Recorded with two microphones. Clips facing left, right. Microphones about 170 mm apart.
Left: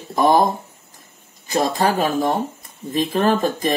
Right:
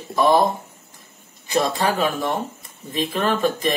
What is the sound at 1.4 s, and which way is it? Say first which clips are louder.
Speech: left 2 dB; 40° left (ahead or behind).